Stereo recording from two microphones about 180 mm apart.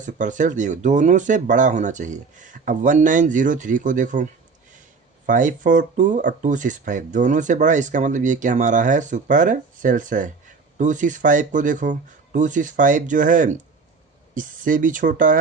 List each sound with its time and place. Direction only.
0.0 s speech: 45° right (ahead or behind)